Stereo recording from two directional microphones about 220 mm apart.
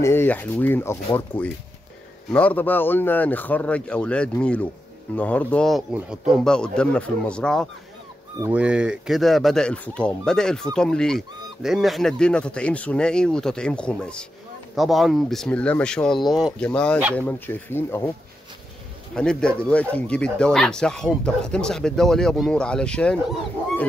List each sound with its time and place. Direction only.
0.0 s a man's voice: 10° left (ahead or behind)
8.4 s a man's voice: 5° right (ahead or behind); by 18.1 s 10° left (ahead or behind)
19.1 s speech: 5° left (ahead or behind)